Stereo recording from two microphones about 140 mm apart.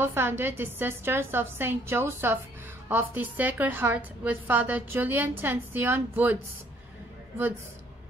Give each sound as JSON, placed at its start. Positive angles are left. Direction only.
{"t": 0.0, "sound": "a woman's voice", "side_deg": -15}